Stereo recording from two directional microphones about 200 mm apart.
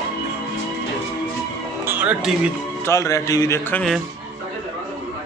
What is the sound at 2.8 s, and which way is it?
Speech, 15° left (ahead or behind).